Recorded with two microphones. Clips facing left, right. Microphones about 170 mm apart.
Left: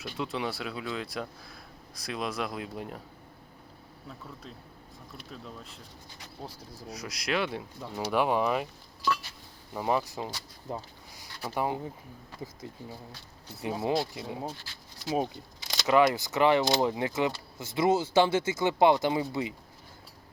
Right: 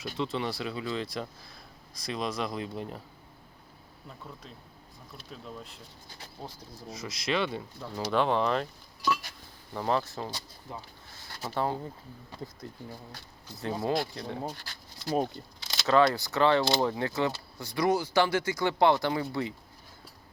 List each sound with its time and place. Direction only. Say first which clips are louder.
0.0 s speech: right 1 dB; 5° left (ahead or behind)
5.3 s speech: right 2 dB; centre (ahead or behind)
9.7 s speech: even; 10° left (ahead or behind)
11.5 s speech: even; 15° left (ahead or behind)
14.6 s a sound: right 1 dB; 50° right (ahead or behind)
15.6 s speech: even; 15° left (ahead or behind)